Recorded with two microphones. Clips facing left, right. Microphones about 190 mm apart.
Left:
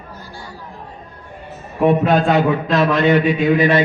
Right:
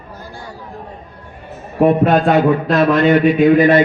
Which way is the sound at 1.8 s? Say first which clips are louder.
Right 2 dB; 45° right (ahead or behind).